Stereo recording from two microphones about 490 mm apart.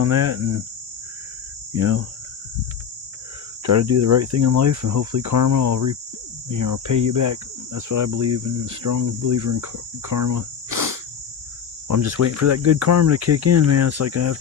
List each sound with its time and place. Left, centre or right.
0.0 s cricket: right
1.7 s cricket: right
3.7 s cricket: right
10.1 s insect: right
11.9 s cricket: right